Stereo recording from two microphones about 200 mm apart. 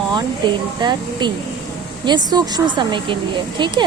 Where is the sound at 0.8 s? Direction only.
20° right (ahead or behind).